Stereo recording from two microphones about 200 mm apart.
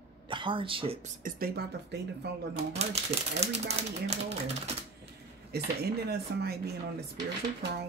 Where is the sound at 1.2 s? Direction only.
45° right (ahead or behind).